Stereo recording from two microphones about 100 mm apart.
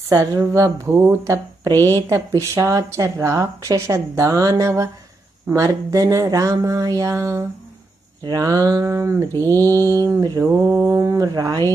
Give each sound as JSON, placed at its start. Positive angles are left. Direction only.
{"t": 0.1, "sound": "speech", "side_deg": -30}